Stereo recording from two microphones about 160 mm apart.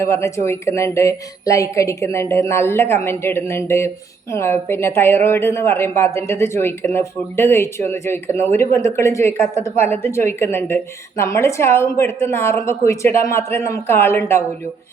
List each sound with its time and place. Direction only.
0.0 s a woman's voice: 15° left (ahead or behind)